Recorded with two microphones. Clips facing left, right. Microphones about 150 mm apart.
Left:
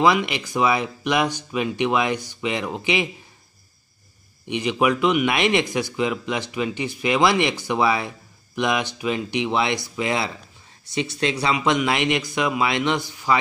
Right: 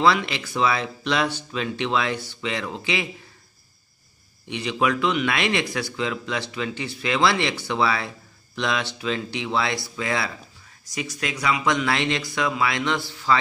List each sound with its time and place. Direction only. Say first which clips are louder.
0.0 s speech: left 2 dB; 15° left (ahead or behind)
4.5 s speech: left 3 dB; 20° left (ahead or behind)